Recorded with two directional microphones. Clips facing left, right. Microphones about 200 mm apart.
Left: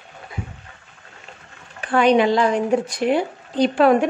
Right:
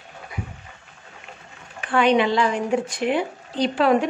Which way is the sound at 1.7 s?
40° left (ahead or behind).